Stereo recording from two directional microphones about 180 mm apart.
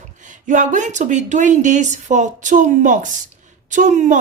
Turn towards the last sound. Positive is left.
turn(degrees=-45)  # may be behind; listen again after turning